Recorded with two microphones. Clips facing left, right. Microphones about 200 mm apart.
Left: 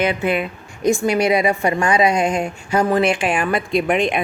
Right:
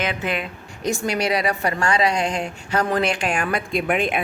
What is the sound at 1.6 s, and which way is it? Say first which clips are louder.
Speech: left 4 dB; 15° left (ahead or behind).